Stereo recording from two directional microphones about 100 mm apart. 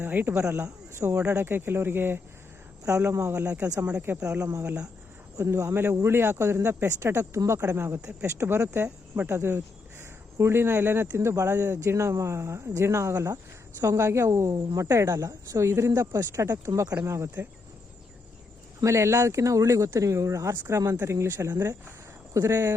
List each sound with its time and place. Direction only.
0.0 s speech: 20° right (ahead or behind)
18.8 s speech: 30° right (ahead or behind)